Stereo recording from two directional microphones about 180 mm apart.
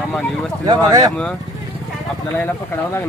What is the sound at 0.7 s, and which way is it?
Speech, 20° right (ahead or behind).